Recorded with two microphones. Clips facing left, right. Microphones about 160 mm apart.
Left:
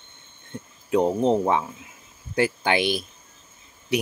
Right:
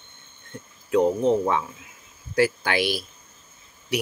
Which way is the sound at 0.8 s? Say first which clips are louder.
Even; 25° left (ahead or behind).